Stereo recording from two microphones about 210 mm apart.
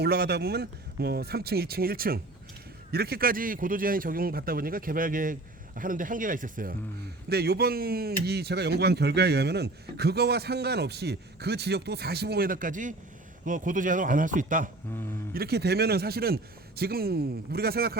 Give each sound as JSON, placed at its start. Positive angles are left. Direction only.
{"t": 0.0, "sound": "a man's voice", "side_deg": -50}